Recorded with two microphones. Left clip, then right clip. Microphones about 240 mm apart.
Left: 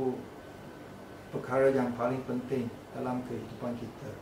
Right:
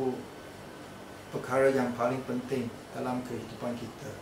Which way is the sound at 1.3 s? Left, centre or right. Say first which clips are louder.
Right 1 dB; centre.